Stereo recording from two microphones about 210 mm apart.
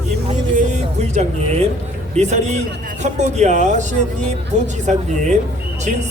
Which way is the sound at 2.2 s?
35° right (ahead or behind).